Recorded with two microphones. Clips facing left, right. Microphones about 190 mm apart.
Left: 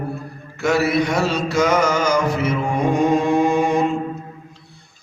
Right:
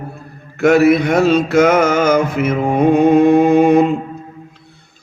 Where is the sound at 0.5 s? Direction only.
55° right (ahead or behind).